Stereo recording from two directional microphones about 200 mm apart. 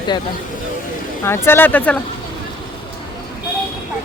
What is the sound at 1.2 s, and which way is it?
Speech, 10° left (ahead or behind).